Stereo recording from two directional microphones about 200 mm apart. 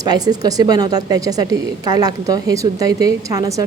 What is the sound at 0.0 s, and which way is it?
Speech, 20° right (ahead or behind).